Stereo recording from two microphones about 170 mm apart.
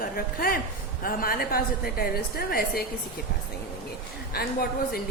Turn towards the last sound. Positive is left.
turn(degrees=65)  # may be behind; listen again after turning